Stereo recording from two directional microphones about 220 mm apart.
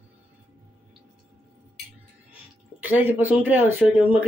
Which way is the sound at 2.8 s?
10° right (ahead or behind).